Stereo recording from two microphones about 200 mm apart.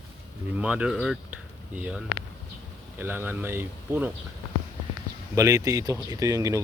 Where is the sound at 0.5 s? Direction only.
5° right (ahead or behind).